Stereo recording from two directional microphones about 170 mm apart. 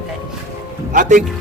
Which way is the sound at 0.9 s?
50° right (ahead or behind).